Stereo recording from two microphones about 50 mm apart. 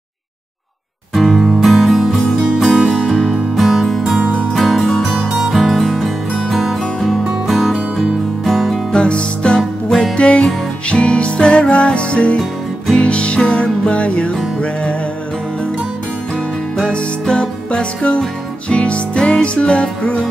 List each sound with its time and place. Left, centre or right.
1.1 s music: centre
4.0 s music: right
4.6 s music: centre
8.9 s music: left
16.7 s music: centre